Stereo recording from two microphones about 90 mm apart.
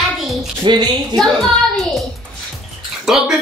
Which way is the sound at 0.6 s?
55° right (ahead or behind).